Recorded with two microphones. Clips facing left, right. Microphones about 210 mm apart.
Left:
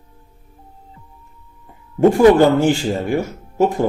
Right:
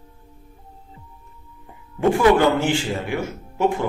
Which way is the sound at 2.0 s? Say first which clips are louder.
Left 6 dB; 40° left (ahead or behind).